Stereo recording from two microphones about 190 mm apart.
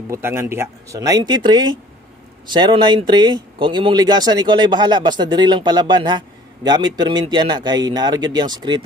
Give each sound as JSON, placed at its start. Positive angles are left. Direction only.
{"t": 0.1, "sound": "speech", "side_deg": -15}